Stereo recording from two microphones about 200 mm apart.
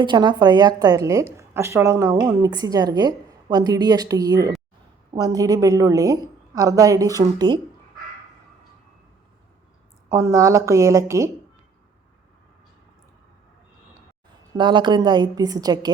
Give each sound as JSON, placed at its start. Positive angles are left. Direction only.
{"t": 0.0, "sound": "a woman's voice", "side_deg": -20}
{"t": 10.1, "sound": "a woman's voice", "side_deg": -15}
{"t": 14.5, "sound": "a woman's voice", "side_deg": -25}